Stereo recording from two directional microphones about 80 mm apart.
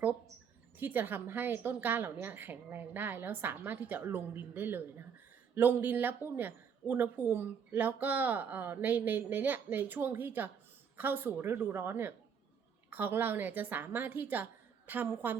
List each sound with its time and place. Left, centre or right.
0.8 s speech: right